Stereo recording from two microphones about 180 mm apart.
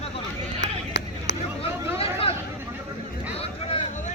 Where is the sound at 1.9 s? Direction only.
30° left (ahead or behind).